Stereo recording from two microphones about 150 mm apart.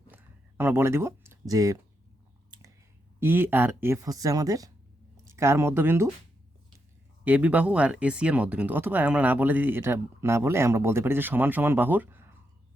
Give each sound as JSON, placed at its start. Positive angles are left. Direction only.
{"t": 0.1, "sound": "a sound", "side_deg": -15}
{"t": 3.2, "sound": "speech", "side_deg": -15}
{"t": 7.3, "sound": "speech", "side_deg": -10}